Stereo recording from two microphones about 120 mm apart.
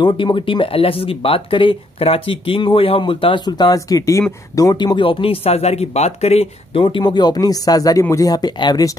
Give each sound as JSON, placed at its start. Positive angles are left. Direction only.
{"t": 0.0, "sound": "speech", "side_deg": 45}